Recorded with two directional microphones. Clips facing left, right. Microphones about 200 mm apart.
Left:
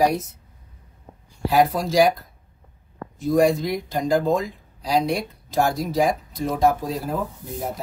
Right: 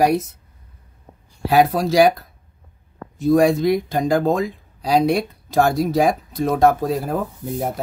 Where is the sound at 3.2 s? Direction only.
65° right (ahead or behind).